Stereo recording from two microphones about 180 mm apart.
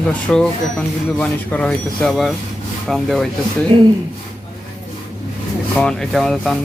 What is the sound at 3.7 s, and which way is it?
Speech, 30° right (ahead or behind).